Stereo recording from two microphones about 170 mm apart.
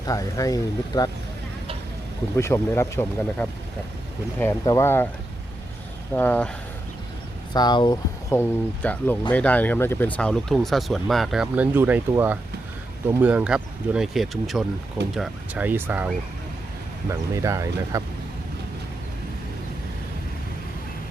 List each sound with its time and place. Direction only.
0.0 s speech: 20° left (ahead or behind)
2.3 s speech: 15° left (ahead or behind)
6.1 s speech: 10° left (ahead or behind)
7.5 s speech: 25° left (ahead or behind)
8.3 s speech: 10° left (ahead or behind); by 18.0 s 15° right (ahead or behind)